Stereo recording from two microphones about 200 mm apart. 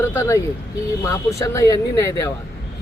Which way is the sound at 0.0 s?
10° left (ahead or behind).